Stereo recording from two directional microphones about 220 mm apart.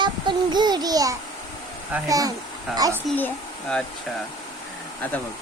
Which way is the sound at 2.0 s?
15° right (ahead or behind).